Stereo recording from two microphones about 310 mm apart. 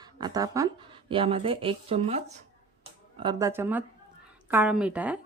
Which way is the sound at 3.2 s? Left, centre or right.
Centre.